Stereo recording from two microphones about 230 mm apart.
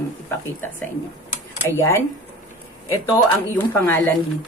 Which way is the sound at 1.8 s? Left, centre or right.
Centre.